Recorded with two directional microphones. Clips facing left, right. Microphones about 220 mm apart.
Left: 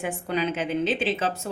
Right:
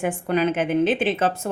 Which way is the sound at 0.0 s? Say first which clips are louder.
Right 5 dB; 55° right (ahead or behind).